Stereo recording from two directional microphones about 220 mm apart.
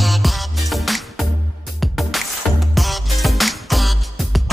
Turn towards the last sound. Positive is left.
turn(degrees=0)  # may be behind; listen again after turning